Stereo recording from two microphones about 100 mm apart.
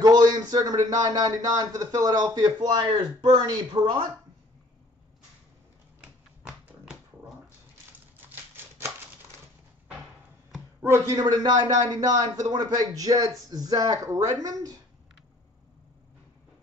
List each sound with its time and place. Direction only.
0.0 s a man's voice: 40° right (ahead or behind)
3.2 s speech: 50° right (ahead or behind)
5.9 s dog: 5° right (ahead or behind)
10.8 s speech: 25° right (ahead or behind)
11.2 s a man's voice: 45° right (ahead or behind)